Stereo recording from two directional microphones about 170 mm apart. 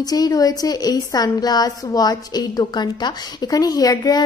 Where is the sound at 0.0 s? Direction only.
20° left (ahead or behind).